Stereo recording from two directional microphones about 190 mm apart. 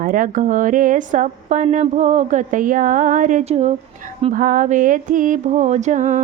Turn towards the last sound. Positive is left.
turn(degrees=-40)  # may be behind; listen again after turning